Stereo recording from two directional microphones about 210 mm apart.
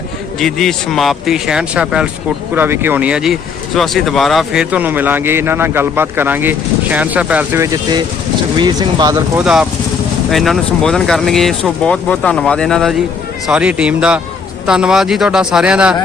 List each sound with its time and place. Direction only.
0.3 s speech: centre (ahead or behind); by 9.4 s 15° right (ahead or behind)
9.4 s speech: 5° right (ahead or behind)